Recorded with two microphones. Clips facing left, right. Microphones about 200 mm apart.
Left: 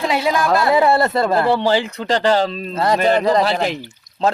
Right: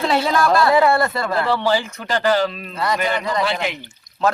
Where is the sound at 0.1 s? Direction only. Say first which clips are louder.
Even; 15° left (ahead or behind).